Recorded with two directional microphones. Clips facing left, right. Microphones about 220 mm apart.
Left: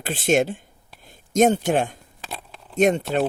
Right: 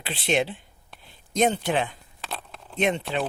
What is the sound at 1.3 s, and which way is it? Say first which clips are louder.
Speech: left 5 dB; 45° left (ahead or behind).